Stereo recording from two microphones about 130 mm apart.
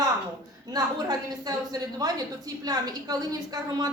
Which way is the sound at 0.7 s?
30° right (ahead or behind).